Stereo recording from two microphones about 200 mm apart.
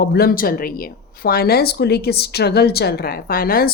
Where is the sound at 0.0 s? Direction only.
50° left (ahead or behind).